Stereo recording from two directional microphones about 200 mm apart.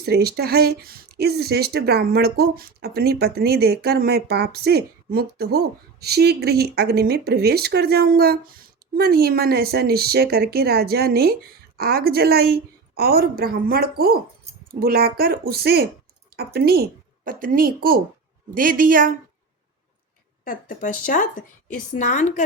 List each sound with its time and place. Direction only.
0.0 s speech: 50° right (ahead or behind)
20.4 s a woman's voice: 45° left (ahead or behind)